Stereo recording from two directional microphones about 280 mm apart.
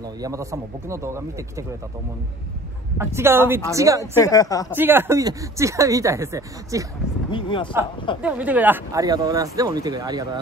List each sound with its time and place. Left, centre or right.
0.0 s speech: centre
3.0 s speech: centre
4.2 s speech: centre
4.7 s speech: centre
7.2 s speech: centre
8.2 s speech: centre